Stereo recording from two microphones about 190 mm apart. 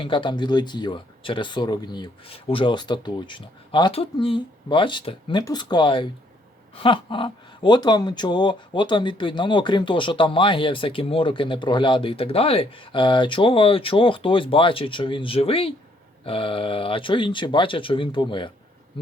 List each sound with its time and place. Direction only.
0.0 s speech: 25° left (ahead or behind)